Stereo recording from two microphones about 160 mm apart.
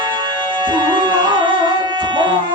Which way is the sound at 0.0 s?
30° right (ahead or behind).